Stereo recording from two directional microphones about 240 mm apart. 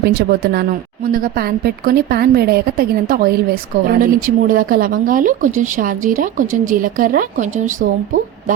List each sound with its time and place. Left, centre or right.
0.0 s speech: right